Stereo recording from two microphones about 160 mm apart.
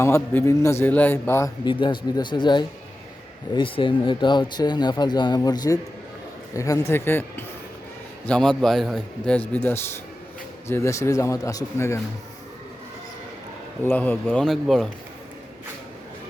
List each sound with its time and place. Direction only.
0.0 s a man's voice: 15° left (ahead or behind)
1.6 s a man's voice: 30° left (ahead or behind)
13.8 s a man's voice: 10° left (ahead or behind)